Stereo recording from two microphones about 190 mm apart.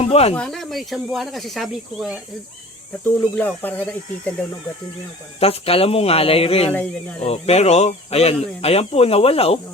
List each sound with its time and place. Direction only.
0.0 s speech: 35° left (ahead or behind)
0.3 s speech: 5° left (ahead or behind)
5.4 s speech: 30° left (ahead or behind)